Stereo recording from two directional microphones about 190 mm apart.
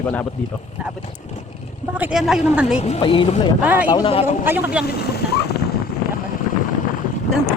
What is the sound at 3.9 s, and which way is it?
Speech, 30° left (ahead or behind).